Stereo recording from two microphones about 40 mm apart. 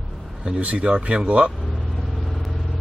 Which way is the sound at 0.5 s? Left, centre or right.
Right.